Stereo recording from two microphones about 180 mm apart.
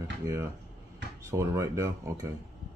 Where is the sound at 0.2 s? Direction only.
15° right (ahead or behind).